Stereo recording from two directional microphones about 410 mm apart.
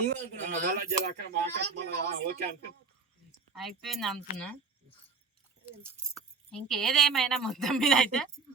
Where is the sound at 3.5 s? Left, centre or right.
Centre.